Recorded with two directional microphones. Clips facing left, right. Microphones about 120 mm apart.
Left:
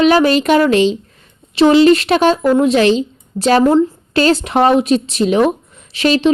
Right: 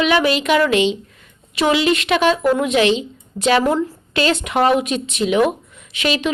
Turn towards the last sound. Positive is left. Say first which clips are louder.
# left 8 dB
turn(degrees=35)  # may be behind; listen again after turning